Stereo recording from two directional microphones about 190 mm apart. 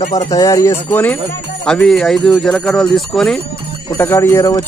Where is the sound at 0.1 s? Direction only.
20° left (ahead or behind).